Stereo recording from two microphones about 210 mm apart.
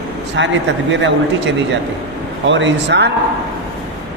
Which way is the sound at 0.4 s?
60° right (ahead or behind).